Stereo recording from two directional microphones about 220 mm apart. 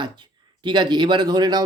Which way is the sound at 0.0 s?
20° right (ahead or behind).